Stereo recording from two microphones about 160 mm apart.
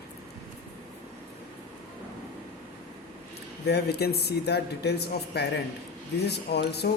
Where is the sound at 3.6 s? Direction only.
90° left.